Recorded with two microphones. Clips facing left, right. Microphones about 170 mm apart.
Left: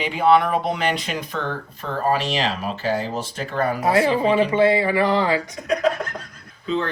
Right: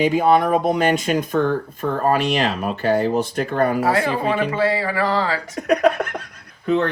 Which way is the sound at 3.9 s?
20° left (ahead or behind).